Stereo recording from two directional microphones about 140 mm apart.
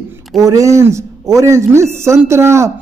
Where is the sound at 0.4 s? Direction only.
25° right (ahead or behind).